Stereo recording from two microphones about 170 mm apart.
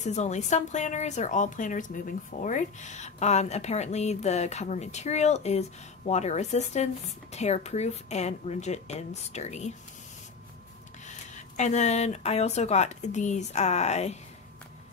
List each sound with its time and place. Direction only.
0.0 s a woman's voice: 45° left (ahead or behind)
11.1 s speech: 45° left (ahead or behind)